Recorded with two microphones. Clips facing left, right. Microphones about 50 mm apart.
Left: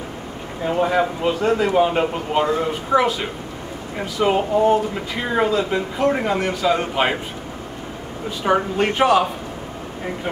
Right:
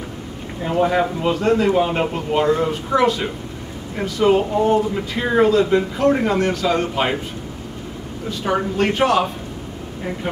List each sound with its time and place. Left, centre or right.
0.7 s speech: centre
1.4 s speech: centre
1.8 s speech: centre
8.7 s speech: centre